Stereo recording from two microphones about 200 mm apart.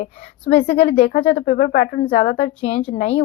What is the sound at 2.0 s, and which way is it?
A woman's voice, 30° left (ahead or behind).